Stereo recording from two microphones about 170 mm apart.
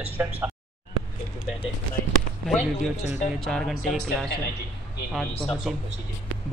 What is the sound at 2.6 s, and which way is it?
Speech, 45° left (ahead or behind).